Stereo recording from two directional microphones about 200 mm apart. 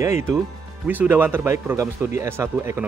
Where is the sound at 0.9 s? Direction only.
10° right (ahead or behind).